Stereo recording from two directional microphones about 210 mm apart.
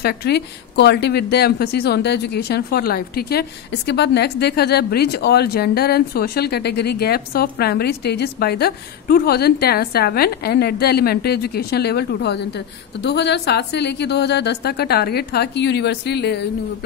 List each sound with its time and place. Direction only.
0.0 s speech: 50° left (ahead or behind)